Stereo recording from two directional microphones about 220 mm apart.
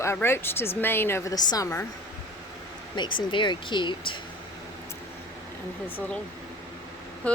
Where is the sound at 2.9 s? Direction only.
20° left (ahead or behind).